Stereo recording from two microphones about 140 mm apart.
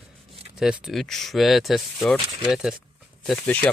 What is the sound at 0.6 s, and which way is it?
Speech, 5° right (ahead or behind).